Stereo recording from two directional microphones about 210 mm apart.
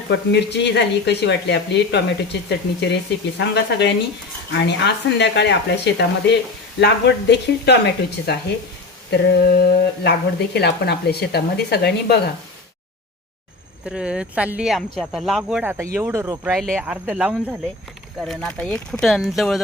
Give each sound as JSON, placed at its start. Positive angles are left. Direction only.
{"t": 0.1, "sound": "speech", "side_deg": 55}
{"t": 9.0, "sound": "speech", "side_deg": 50}
{"t": 13.8, "sound": "speech", "side_deg": -5}
{"t": 16.6, "sound": "speech", "side_deg": 0}